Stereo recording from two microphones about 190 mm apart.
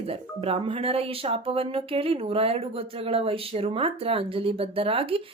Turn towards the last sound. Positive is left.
turn(degrees=-30)  # may be behind; listen again after turning